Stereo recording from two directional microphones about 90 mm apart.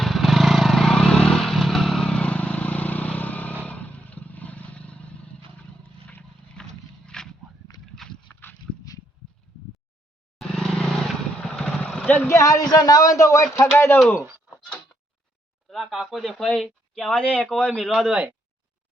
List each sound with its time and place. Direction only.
0.0 s vehicle: centre (ahead or behind)
6.1 s wild animals: 15° left (ahead or behind)
7.7 s a sound: 50° left (ahead or behind)
10.3 s vehicle: centre (ahead or behind)
12.3 s a man's voice: 40° left (ahead or behind)
15.7 s speech: centre (ahead or behind)
17.7 s speech: centre (ahead or behind)